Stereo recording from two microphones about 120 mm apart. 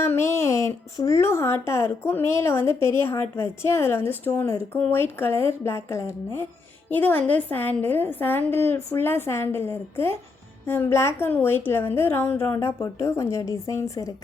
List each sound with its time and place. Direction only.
0.0 s a woman's voice: 20° left (ahead or behind)